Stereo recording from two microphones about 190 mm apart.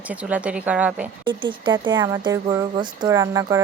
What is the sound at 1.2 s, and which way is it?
Speech, 25° right (ahead or behind).